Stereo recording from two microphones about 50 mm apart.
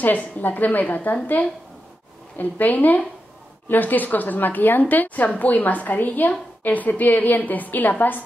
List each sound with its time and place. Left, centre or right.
0.0 s a woman's voice: left